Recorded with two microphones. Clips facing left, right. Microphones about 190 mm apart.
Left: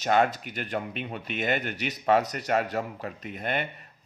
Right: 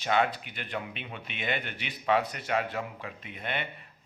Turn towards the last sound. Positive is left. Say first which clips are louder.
# left 5 dB
turn(degrees=45)  # may be behind; listen again after turning